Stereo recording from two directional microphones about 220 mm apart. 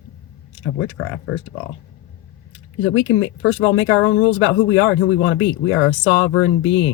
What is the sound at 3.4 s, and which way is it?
Speech, 65° left (ahead or behind).